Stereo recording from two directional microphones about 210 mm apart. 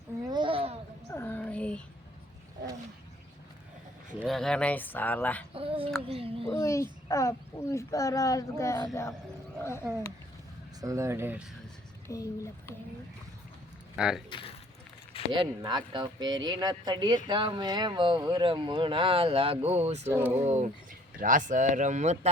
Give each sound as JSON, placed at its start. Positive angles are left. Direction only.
{"t": 0.2, "sound": "a sound", "side_deg": -20}
{"t": 1.1, "sound": "a sound", "side_deg": 10}
{"t": 4.3, "sound": "speech", "side_deg": 0}
{"t": 5.5, "sound": "a sound", "side_deg": -25}
{"t": 6.1, "sound": "a child's voice", "side_deg": -25}
{"t": 6.5, "sound": "speech", "side_deg": 15}
{"t": 10.8, "sound": "speech", "side_deg": -15}
{"t": 12.0, "sound": "speech", "side_deg": 15}
{"t": 13.9, "sound": "speech", "side_deg": -5}
{"t": 14.3, "sound": "speech", "side_deg": 25}
{"t": 15.3, "sound": "speech", "side_deg": -20}
{"t": 20.1, "sound": "speech", "side_deg": -10}
{"t": 20.4, "sound": "speech", "side_deg": -35}